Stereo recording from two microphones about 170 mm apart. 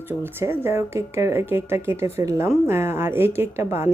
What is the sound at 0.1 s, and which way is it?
A woman's voice, 15° right (ahead or behind).